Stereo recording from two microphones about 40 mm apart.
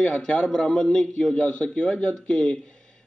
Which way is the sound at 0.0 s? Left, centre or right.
Left.